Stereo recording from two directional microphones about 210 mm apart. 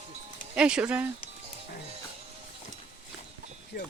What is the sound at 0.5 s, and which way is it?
Speech, 5° right (ahead or behind).